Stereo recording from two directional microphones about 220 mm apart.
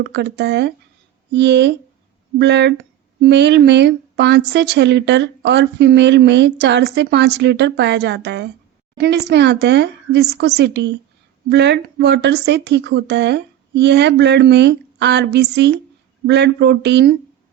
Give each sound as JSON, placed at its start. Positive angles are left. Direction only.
{"t": 0.0, "sound": "a woman's voice", "side_deg": -50}